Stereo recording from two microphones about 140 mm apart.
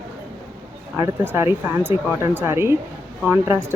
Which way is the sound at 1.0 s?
20° right (ahead or behind).